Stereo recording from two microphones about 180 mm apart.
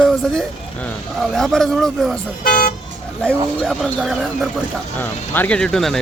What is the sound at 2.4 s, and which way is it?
Speech, 50° left (ahead or behind).